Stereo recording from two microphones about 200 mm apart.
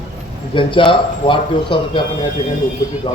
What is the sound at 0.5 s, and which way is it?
A man's voice, 25° left (ahead or behind).